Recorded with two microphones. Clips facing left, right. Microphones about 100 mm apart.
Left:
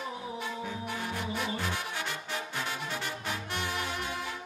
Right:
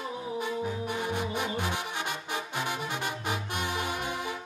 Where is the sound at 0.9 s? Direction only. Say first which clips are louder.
Right 4 dB; 15° right (ahead or behind).